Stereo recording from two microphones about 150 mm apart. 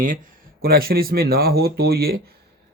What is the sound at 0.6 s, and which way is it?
Speech, 90° right.